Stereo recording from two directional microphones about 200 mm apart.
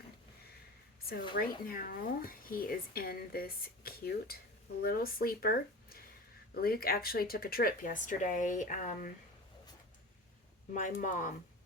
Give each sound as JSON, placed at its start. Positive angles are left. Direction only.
{"t": 1.4, "sound": "speech", "side_deg": 45}
{"t": 10.8, "sound": "speech", "side_deg": 40}